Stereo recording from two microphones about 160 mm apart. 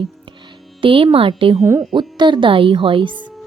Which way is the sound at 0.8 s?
35° right (ahead or behind).